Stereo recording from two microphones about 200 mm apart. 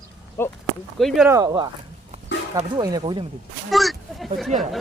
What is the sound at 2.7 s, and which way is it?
Speech, 20° right (ahead or behind).